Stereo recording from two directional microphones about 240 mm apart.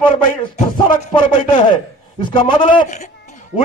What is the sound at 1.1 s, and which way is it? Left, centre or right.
A man's voice, centre.